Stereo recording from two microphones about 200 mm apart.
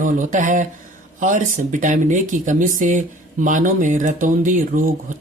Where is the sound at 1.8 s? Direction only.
40° right (ahead or behind).